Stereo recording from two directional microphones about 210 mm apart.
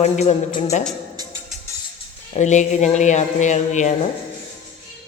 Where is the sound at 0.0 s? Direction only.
30° left (ahead or behind).